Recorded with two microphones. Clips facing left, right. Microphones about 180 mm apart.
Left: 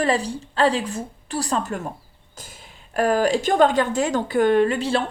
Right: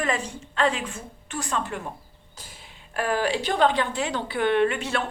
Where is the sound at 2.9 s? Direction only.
40° left (ahead or behind).